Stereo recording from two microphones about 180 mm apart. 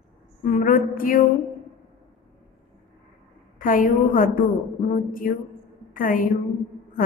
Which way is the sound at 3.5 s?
50° left (ahead or behind).